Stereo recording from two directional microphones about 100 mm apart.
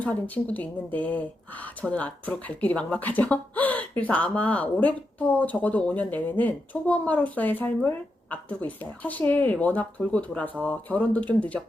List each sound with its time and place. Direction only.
0.0 s speech: 15° left (ahead or behind)